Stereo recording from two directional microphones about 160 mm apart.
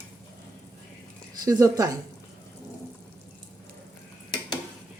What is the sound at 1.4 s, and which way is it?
Speech, 20° right (ahead or behind).